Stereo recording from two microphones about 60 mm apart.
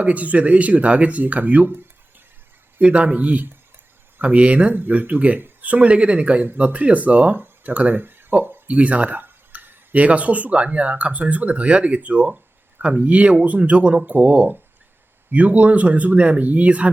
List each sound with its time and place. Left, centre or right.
0.0 s speech: right
2.8 s speech: right